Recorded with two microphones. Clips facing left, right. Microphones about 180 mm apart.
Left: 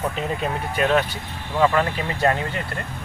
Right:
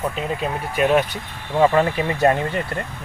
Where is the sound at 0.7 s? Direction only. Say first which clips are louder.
Right 3 dB; 10° right (ahead or behind).